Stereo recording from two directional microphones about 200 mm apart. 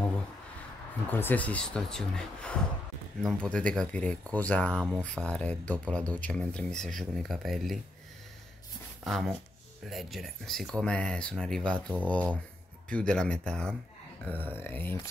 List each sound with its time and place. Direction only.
1.1 s speech: 10° left (ahead or behind)
9.0 s speech: centre (ahead or behind)